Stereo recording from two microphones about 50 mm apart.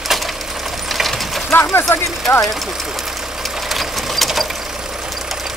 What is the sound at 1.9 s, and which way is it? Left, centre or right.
Speech, left.